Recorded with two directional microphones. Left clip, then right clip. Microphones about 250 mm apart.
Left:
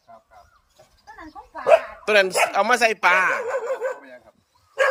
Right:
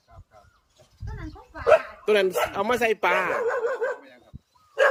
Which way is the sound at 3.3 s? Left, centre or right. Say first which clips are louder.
Left 1 dB; left.